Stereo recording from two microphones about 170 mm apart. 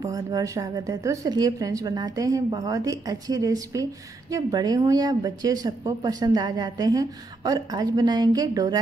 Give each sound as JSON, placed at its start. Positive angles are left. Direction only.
{"t": 0.0, "sound": "speech", "side_deg": -20}